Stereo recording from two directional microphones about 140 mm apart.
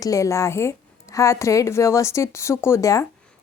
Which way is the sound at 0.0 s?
25° left (ahead or behind).